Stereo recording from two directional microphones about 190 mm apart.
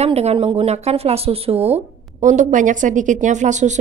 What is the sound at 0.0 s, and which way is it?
Speech, 35° right (ahead or behind).